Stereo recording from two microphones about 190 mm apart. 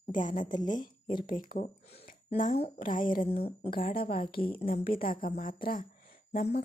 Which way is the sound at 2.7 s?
45° left (ahead or behind).